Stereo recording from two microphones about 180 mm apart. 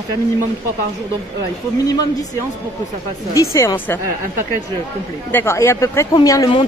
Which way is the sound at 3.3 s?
15° left (ahead or behind).